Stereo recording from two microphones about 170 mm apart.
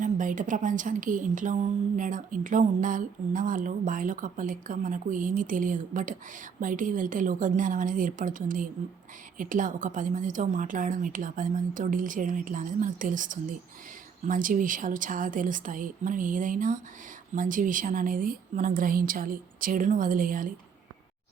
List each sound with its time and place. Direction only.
0.0 s a woman's voice: 50° right (ahead or behind)